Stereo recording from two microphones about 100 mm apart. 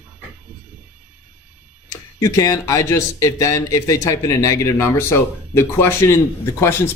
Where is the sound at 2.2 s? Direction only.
35° left (ahead or behind).